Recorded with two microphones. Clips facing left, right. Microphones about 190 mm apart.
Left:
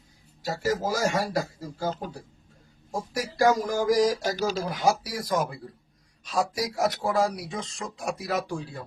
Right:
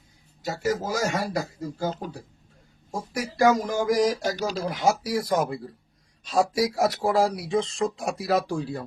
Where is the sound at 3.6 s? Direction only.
20° right (ahead or behind).